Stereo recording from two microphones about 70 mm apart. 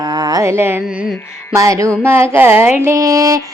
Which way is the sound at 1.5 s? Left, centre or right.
Right.